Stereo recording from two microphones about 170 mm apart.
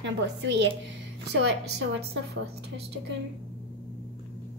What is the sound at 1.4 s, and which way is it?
Speech, 75° right (ahead or behind).